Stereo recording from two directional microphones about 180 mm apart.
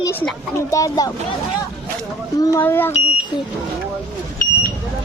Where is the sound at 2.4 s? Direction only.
15° left (ahead or behind).